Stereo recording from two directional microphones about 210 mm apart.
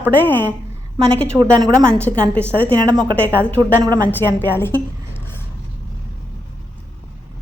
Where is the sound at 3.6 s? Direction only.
15° right (ahead or behind).